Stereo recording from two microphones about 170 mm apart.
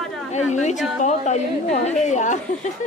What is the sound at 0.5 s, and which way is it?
A woman's voice, 45° left (ahead or behind).